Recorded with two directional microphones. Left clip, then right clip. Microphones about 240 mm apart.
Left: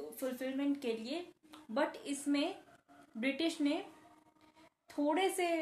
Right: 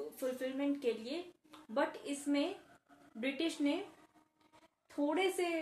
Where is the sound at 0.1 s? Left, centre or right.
Left.